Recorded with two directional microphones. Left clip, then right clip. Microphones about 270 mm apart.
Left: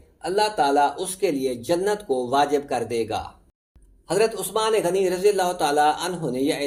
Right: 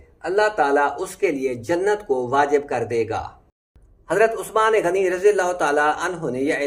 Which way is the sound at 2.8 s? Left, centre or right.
Left.